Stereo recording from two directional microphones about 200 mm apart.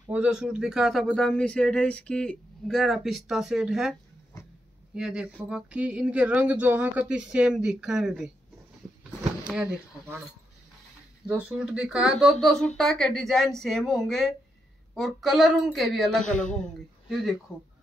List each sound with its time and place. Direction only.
0.1 s a man's voice: 5° right (ahead or behind)
4.9 s a man's voice: 5° right (ahead or behind)
9.5 s speech: 5° right (ahead or behind)
11.2 s a man's voice: 5° right (ahead or behind)
16.3 s speech: 40° left (ahead or behind)
17.1 s a man's voice: centre (ahead or behind)